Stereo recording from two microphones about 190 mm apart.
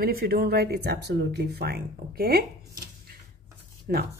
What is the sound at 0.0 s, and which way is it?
Speech, 55° right (ahead or behind).